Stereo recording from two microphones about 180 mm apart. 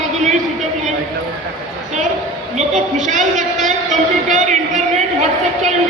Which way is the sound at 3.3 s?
45° right (ahead or behind).